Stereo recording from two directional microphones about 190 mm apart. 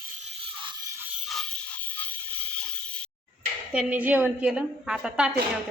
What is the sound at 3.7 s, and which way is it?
A woman's voice, 5° right (ahead or behind).